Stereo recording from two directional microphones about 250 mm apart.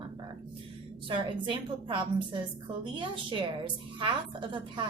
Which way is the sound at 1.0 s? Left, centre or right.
Centre.